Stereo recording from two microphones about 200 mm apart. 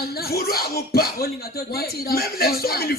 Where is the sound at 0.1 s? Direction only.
50° left (ahead or behind).